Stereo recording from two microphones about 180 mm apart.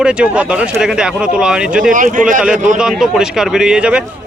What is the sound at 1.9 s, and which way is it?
Speech, 45° right (ahead or behind).